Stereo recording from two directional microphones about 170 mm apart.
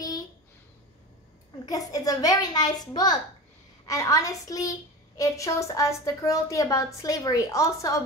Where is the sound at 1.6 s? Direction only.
20° left (ahead or behind).